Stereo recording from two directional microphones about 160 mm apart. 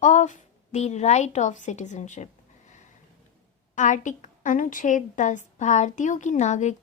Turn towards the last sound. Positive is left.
turn(degrees=45)  # may be behind; listen again after turning